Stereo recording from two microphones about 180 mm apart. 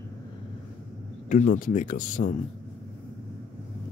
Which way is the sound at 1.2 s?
45° left (ahead or behind).